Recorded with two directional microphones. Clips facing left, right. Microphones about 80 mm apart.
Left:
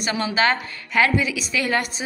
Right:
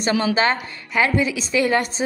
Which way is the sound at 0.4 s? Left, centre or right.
Right.